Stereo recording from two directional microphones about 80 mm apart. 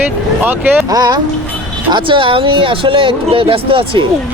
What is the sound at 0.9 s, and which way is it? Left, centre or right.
Speech, right.